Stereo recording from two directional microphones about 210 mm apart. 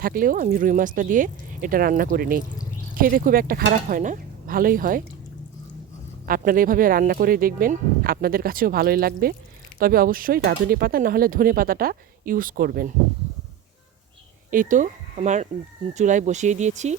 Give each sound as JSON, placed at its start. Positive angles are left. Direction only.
{"t": 0.0, "sound": "speech", "side_deg": -40}
{"t": 6.2, "sound": "speech", "side_deg": -45}
{"t": 14.5, "sound": "speech", "side_deg": -40}